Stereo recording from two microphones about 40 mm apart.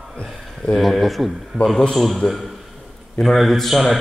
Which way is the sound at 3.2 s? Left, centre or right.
Centre.